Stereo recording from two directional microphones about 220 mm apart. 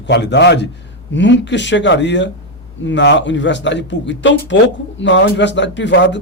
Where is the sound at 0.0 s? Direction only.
50° left (ahead or behind).